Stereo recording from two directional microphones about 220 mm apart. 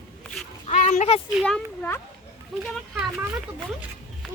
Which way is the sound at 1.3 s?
Centre (ahead or behind).